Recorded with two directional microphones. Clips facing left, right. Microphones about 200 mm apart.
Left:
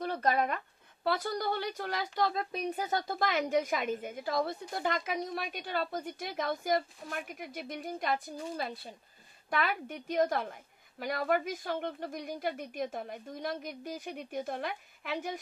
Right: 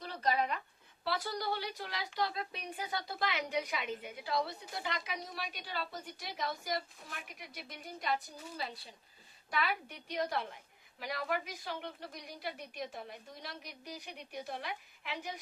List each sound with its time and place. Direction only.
0.0 s a woman's voice: 55° left (ahead or behind)